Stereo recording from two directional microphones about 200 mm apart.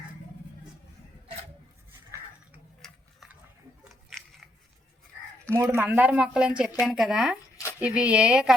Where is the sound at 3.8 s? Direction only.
Centre (ahead or behind).